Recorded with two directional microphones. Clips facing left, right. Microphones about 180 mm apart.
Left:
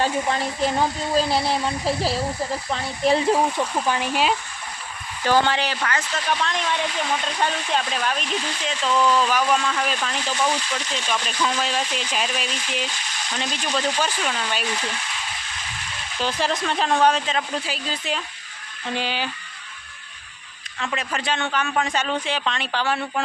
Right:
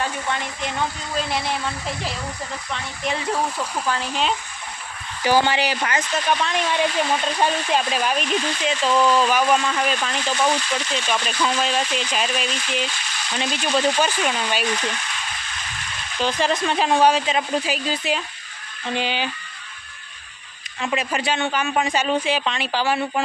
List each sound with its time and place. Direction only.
0.0 s speech: 35° left (ahead or behind)
3.8 s speech: 15° left (ahead or behind)
5.2 s speech: 10° right (ahead or behind)
10.1 s speech: 10° left (ahead or behind)
11.0 s speech: 10° right (ahead or behind)
11.7 s speech: 10° left (ahead or behind)
12.8 s frying: 15° left (ahead or behind)
13.3 s speech: 5° right (ahead or behind)
16.1 s speech: 5° left (ahead or behind)
16.6 s speech: 5° right (ahead or behind)
18.9 s speech: centre (ahead or behind)
20.7 s speech: 10° right (ahead or behind)